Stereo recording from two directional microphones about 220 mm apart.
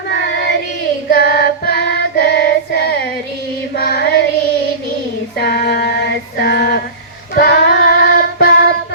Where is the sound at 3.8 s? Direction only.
45° left (ahead or behind).